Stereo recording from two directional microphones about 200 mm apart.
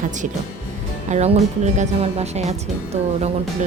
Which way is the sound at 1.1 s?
35° right (ahead or behind).